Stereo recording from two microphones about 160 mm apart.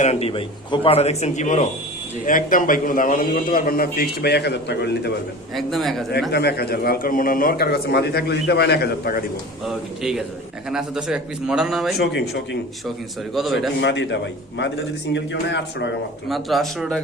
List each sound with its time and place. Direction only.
0.0 s a man's voice: 40° left (ahead or behind); by 5.1 s 90° left
5.5 s a man's voice: centre (ahead or behind)
6.3 s speech: 90° left
9.6 s a man's voice: 5° right (ahead or behind)
11.9 s speech: 90° left
13.3 s a man's voice: centre (ahead or behind)
13.8 s speech: 90° left
16.3 s a man's voice: centre (ahead or behind)